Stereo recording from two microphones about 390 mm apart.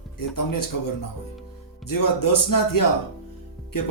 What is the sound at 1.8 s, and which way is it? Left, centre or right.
A man's voice, left.